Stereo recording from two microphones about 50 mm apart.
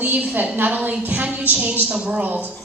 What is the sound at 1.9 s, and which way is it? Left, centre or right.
Speech, centre.